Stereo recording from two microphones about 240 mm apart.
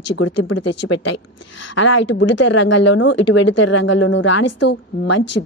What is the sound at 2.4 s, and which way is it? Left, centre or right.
A woman's voice, left.